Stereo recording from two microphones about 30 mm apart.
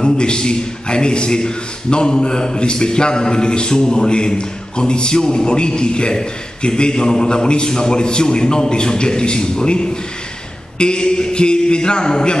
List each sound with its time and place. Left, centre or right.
0.0 s a man's voice: left